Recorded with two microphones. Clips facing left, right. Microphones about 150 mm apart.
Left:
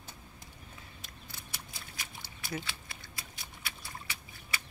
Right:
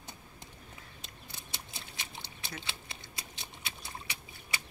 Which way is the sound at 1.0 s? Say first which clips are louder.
Even; 25° right (ahead or behind).